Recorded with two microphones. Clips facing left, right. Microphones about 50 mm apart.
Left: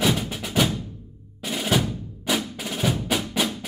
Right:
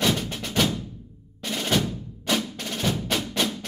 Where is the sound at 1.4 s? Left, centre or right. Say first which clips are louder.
Left 1 dB; centre.